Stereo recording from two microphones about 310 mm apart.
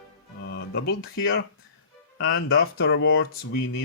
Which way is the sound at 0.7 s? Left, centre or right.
Left.